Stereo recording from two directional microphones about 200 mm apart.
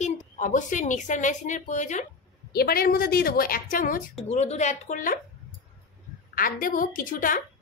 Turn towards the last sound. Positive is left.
turn(degrees=45)  # may be behind; listen again after turning